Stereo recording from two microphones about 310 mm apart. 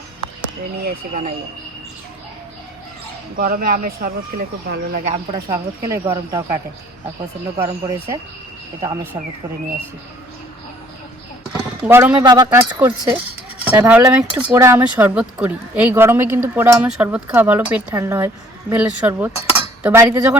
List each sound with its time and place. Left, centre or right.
0.8 s speech: right
3.3 s speech: right
5.3 s speech: centre
11.8 s speech: centre